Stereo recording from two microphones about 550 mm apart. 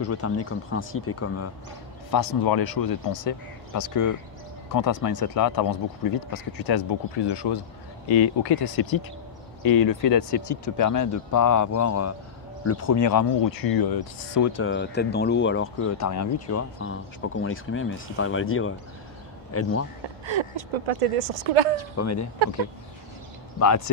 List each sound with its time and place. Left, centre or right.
0.0 s speech: left
2.0 s speech: left
8.1 s speech: left
14.6 s speech: centre
20.2 s speech: right
21.9 s speech: left